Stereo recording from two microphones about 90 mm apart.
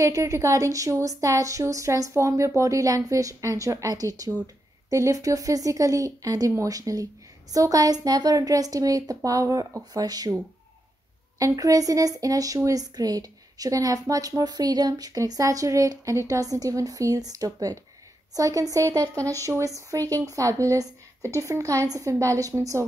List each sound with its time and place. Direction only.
0.0 s speech: 35° right (ahead or behind)
11.3 s speech: 40° right (ahead or behind)